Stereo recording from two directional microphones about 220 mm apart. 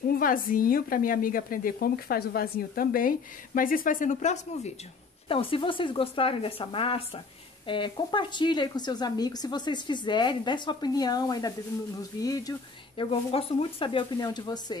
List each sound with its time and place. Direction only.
0.2 s speech: 40° left (ahead or behind); by 14.8 s 20° left (ahead or behind)